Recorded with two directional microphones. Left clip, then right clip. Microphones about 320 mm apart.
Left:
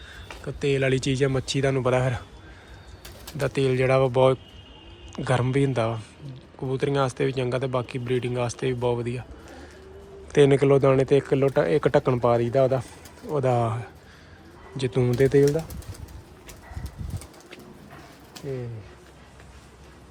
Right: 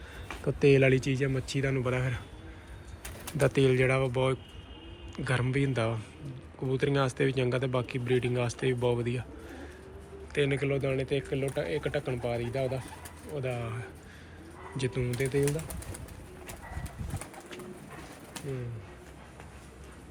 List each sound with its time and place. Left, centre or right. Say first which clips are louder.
0.4 s speech: right 1 dB; centre
3.3 s speech: left 1 dB; centre
10.3 s speech: left 12 dB; centre
13.3 s speech: left 12 dB; left
13.6 s speech: left 12 dB; centre